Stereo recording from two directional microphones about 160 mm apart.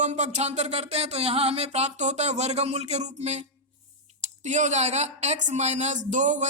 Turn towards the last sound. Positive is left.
turn(degrees=-50)  # may be behind; listen again after turning